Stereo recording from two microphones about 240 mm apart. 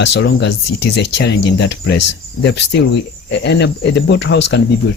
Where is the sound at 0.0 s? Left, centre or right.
Left.